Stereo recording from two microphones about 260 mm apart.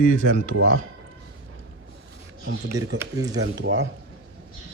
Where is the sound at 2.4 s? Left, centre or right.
Right.